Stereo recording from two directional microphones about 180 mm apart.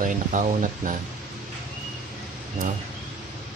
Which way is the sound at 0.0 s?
45° right (ahead or behind).